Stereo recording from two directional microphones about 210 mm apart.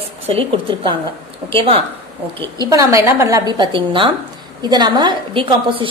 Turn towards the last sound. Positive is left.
turn(degrees=-25)  # may be behind; listen again after turning